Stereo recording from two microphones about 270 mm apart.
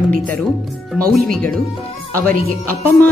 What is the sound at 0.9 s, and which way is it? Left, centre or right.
Speech, centre.